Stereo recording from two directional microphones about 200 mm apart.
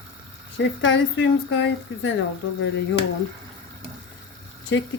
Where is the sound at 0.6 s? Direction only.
65° left (ahead or behind).